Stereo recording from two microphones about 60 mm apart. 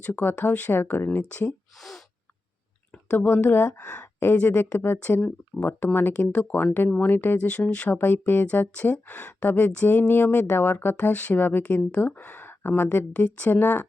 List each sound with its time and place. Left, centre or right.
0.0 s speech: left
3.1 s a woman's voice: left
4.9 s speech: left
7.9 s speech: left